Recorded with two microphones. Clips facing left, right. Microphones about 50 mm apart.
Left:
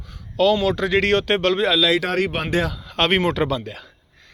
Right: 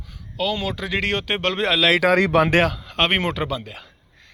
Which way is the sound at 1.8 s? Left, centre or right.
Right.